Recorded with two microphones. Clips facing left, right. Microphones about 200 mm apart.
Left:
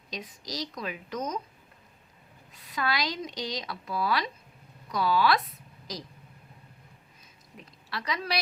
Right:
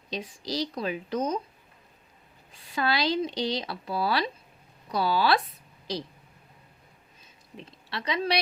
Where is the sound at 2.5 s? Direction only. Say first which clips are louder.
Right 3 dB; 30° right (ahead or behind).